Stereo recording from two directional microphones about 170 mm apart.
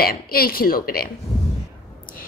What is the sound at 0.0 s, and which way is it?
A woman's voice, 60° left (ahead or behind).